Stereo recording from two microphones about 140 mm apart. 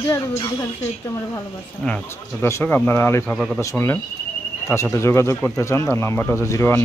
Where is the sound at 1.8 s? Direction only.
10° left (ahead or behind).